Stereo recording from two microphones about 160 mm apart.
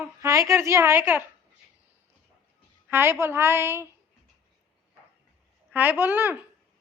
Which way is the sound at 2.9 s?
15° right (ahead or behind).